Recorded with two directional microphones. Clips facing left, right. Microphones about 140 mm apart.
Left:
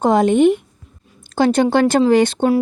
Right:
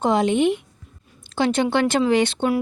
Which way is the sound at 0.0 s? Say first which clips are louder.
Left 6 dB; 45° left (ahead or behind).